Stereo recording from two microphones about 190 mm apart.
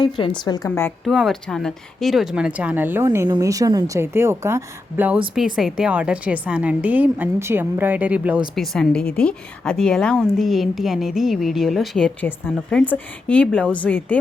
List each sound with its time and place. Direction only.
0.0 s a woman's voice: 25° left (ahead or behind)
1.0 s a woman's voice: centre (ahead or behind)